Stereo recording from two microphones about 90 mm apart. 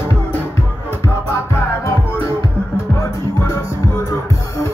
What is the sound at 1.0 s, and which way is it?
Music, 30° left (ahead or behind).